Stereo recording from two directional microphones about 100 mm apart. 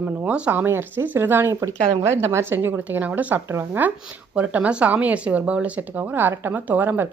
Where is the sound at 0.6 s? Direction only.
25° right (ahead or behind).